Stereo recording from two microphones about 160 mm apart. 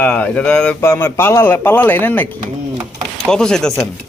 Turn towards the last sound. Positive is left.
turn(degrees=5)  # may be behind; listen again after turning